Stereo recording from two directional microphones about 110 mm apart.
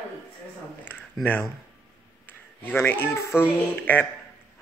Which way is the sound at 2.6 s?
20° left (ahead or behind).